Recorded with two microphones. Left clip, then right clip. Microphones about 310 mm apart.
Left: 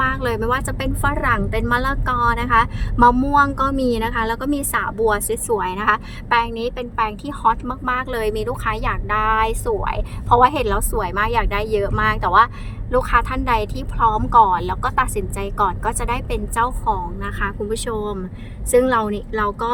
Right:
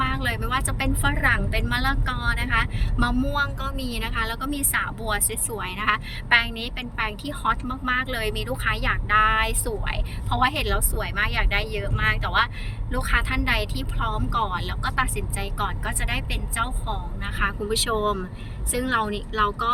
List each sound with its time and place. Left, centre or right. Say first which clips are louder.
0.0 s a woman's voice: left 6 dB; centre